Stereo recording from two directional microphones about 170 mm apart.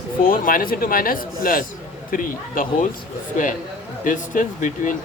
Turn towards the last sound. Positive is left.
turn(degrees=50)  # may be behind; listen again after turning